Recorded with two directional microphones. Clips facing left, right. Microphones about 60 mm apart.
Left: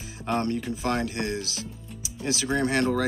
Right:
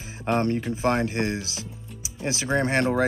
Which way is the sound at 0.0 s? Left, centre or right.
Right.